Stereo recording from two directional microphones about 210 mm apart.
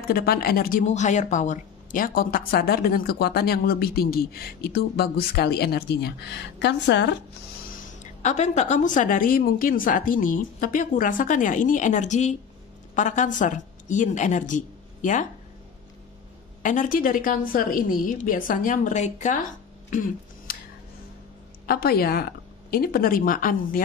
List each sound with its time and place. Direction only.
0.1 s a woman's voice: 45° left (ahead or behind)
8.2 s a woman's voice: 35° left (ahead or behind)
16.6 s a woman's voice: 40° left (ahead or behind)
19.9 s a sound: 40° left (ahead or behind)
21.6 s a woman's voice: 45° left (ahead or behind)